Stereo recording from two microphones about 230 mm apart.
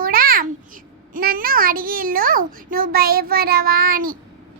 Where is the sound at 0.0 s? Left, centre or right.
Right.